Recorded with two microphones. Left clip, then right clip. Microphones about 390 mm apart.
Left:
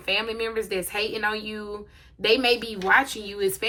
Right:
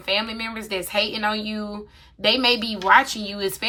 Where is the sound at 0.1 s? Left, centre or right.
Centre.